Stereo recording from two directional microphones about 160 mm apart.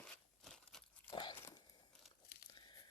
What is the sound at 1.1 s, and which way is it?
Biting, 30° left (ahead or behind).